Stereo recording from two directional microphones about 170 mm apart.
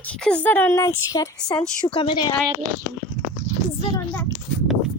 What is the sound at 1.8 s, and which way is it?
Speech, 30° left (ahead or behind).